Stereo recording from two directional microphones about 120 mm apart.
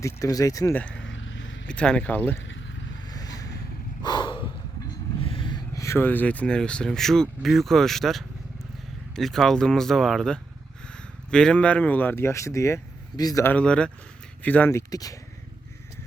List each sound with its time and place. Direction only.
0.0 s speech: 30° left (ahead or behind)
0.7 s speech: 10° left (ahead or behind)
3.1 s vehicle: 30° left (ahead or behind)
4.0 s snort: 40° left (ahead or behind)
5.2 s gasp: 45° left (ahead or behind)
5.8 s speech: 20° left (ahead or behind)
13.4 s speech: 10° left (ahead or behind)
14.8 s speech: 30° left (ahead or behind)